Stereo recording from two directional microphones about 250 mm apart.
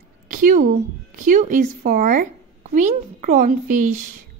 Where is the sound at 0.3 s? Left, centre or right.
Right.